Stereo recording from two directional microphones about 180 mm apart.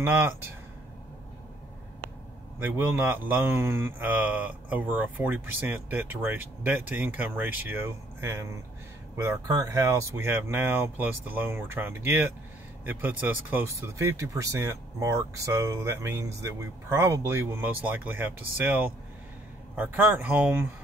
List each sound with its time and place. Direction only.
2.6 s speech: 10° right (ahead or behind)